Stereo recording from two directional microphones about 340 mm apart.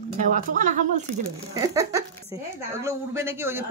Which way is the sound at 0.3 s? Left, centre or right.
Right.